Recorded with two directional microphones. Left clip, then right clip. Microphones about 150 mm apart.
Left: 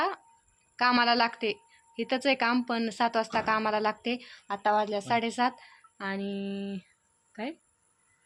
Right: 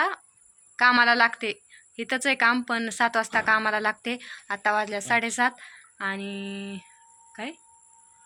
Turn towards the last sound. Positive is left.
turn(degrees=20)  # may be behind; listen again after turning